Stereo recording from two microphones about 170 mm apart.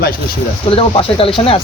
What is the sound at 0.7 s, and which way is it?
Speech, 35° left (ahead or behind).